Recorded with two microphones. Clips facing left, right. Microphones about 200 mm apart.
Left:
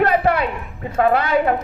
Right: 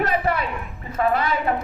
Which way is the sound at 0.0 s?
70° left (ahead or behind).